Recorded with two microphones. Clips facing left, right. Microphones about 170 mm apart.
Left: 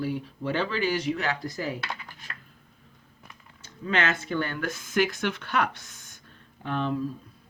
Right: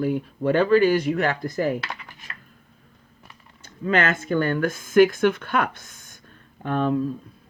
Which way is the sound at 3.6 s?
50° right (ahead or behind).